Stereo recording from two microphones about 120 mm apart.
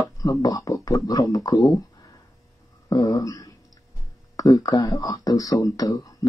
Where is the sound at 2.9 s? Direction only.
30° left (ahead or behind).